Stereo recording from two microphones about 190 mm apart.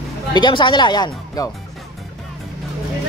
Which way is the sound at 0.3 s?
25° left (ahead or behind).